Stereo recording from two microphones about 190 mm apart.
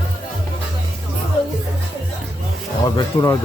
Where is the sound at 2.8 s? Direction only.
20° left (ahead or behind).